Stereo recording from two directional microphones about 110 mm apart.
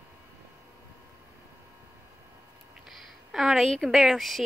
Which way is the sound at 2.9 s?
Centre (ahead or behind).